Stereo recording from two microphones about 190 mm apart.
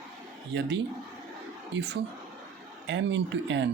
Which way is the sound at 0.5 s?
65° right (ahead or behind).